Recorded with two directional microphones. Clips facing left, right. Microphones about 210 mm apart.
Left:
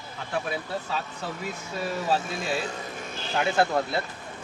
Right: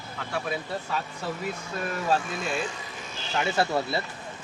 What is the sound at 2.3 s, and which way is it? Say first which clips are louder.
Speech: left 1 dB; 35° left (ahead or behind).